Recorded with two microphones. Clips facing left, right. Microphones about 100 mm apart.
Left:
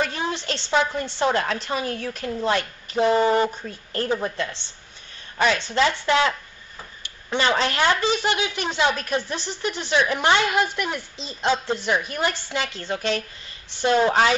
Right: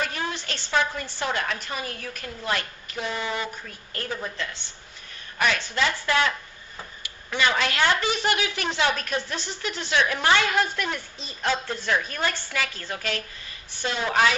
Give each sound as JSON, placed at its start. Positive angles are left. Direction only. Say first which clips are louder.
{"t": 0.2, "sound": "a woman's voice", "louder": "left 4 dB", "side_deg": 25}
{"t": 7.8, "sound": "a woman's voice", "louder": "left 1 dB", "side_deg": 20}